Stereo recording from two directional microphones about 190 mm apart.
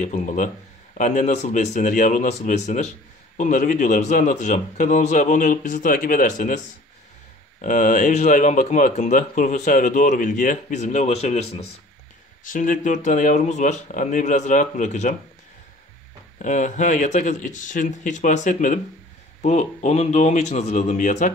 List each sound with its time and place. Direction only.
0.0 s speech: 40° left (ahead or behind)
7.6 s speech: 45° left (ahead or behind)
16.3 s speech: 40° left (ahead or behind)